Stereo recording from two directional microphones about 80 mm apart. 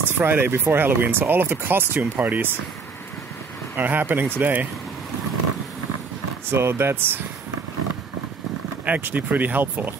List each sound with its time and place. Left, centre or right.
0.2 s speech: right
3.7 s speech: right
6.5 s speech: right
8.8 s speech: right